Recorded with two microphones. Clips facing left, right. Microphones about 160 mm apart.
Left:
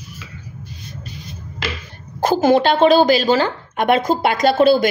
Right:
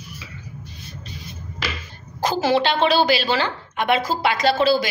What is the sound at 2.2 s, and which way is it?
A woman's voice, 50° left (ahead or behind).